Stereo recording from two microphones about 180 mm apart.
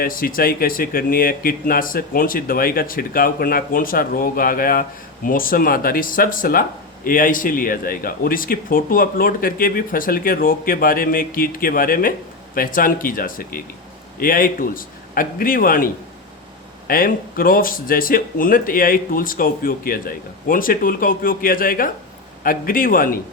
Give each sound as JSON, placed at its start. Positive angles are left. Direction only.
{"t": 0.0, "sound": "speech", "side_deg": 50}